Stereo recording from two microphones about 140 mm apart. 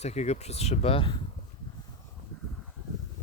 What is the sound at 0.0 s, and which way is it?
Speech, 50° left (ahead or behind).